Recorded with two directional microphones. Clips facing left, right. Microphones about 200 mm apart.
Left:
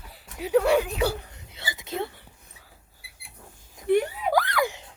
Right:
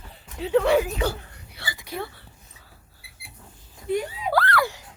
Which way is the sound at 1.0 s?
15° left (ahead or behind).